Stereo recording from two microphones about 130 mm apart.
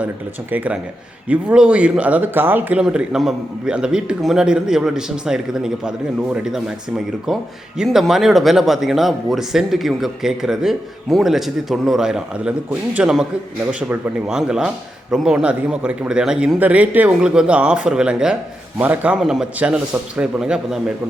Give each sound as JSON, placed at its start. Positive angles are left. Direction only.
{"t": 0.5, "sound": "speech", "side_deg": -10}